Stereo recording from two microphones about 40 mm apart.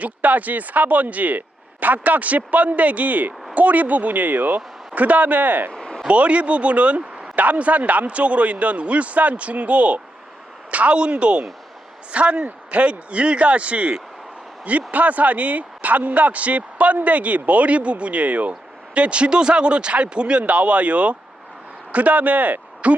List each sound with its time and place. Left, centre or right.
0.0 s speech: right
5.7 s a sound: centre
6.1 s a man's voice: right
10.9 s speech: right